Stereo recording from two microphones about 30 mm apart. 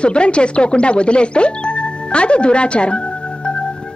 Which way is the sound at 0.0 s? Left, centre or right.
Left.